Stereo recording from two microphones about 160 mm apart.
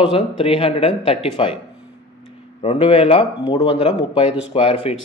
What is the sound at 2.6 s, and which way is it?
A man's voice, 35° left (ahead or behind).